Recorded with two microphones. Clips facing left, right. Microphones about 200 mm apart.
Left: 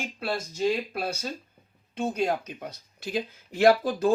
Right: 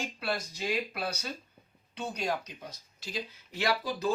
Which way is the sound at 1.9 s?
50° left (ahead or behind).